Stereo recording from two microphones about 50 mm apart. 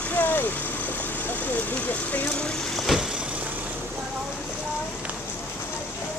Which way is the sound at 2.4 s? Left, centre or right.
Centre.